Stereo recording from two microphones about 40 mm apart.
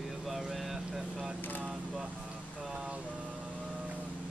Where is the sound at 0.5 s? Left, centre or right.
Centre.